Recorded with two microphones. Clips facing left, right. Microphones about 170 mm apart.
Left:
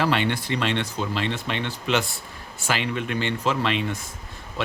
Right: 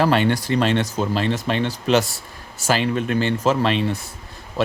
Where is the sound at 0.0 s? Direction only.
40° right (ahead or behind).